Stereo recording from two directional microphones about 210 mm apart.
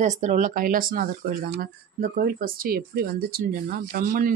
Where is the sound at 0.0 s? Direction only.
35° right (ahead or behind).